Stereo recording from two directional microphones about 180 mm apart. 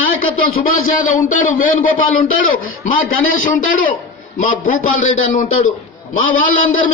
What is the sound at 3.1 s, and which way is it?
Speech, 90° left.